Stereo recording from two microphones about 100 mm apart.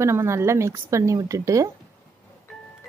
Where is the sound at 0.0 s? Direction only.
30° right (ahead or behind).